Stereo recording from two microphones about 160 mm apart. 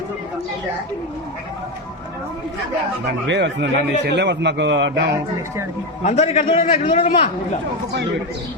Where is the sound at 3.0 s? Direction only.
90° right.